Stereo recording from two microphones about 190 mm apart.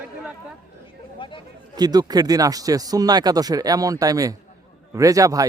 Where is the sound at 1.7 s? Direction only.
20° right (ahead or behind).